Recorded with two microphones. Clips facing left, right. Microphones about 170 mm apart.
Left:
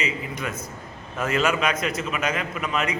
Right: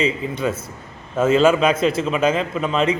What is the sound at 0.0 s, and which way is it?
A man's voice, 30° right (ahead or behind).